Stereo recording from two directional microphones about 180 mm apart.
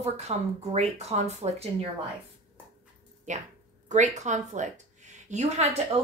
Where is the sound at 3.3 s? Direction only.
40° right (ahead or behind).